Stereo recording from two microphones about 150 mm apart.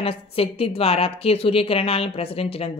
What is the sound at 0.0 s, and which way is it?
Speech, 40° left (ahead or behind).